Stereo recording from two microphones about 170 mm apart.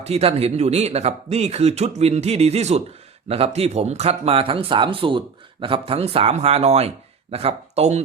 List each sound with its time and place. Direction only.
0.0 s speech: 35° right (ahead or behind)